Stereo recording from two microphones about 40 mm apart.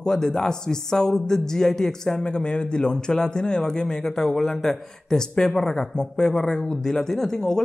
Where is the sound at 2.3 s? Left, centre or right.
Left.